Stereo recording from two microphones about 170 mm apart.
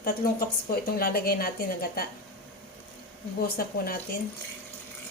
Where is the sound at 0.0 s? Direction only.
60° left (ahead or behind).